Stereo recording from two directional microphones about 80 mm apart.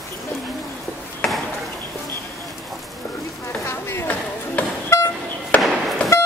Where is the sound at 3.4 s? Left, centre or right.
Left.